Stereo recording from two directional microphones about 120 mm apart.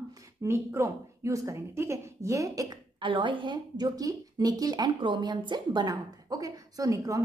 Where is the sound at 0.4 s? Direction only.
25° right (ahead or behind).